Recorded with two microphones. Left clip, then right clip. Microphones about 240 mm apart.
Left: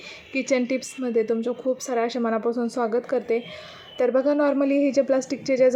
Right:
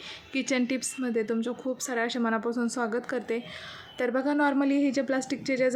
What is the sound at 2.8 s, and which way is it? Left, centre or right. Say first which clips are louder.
Speech: left 9 dB; centre.